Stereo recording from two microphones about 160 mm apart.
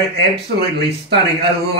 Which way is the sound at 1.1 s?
90° right.